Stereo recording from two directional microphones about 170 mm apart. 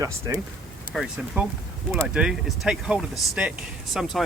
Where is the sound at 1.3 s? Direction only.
10° right (ahead or behind).